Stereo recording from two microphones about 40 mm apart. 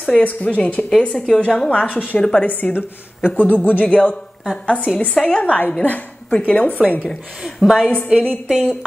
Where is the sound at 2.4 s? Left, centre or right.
Left.